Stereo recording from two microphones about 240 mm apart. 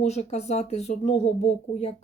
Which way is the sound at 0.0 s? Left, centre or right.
Left.